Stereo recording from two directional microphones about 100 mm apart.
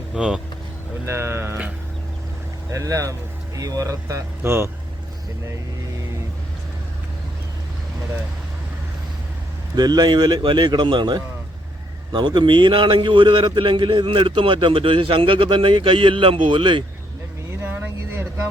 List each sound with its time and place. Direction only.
0.1 s speech: 10° right (ahead or behind)
1.0 s speech: 25° right (ahead or behind)
2.7 s speech: 30° right (ahead or behind)
9.7 s a man's voice: 40° right (ahead or behind)
17.6 s a sound: 20° right (ahead or behind)